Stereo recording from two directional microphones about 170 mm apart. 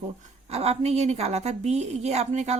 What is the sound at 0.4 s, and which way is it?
Speech, 40° right (ahead or behind).